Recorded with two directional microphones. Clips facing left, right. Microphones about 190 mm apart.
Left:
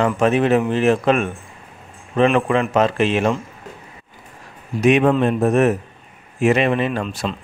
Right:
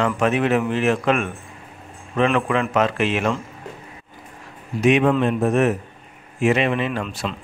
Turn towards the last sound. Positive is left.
turn(degrees=40)  # may be behind; listen again after turning